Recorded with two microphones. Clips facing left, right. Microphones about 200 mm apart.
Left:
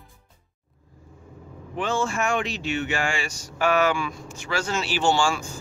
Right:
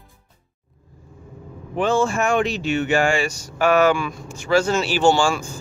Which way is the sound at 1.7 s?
45° right (ahead or behind).